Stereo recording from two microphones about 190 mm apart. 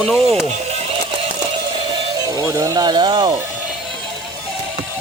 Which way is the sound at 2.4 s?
15° right (ahead or behind).